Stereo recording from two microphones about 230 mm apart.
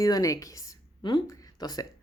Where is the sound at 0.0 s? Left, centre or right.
Centre.